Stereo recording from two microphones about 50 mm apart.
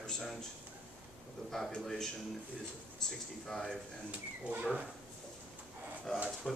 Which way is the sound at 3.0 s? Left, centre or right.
Centre.